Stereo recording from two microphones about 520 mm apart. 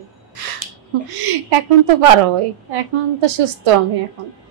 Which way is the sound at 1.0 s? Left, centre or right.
Right.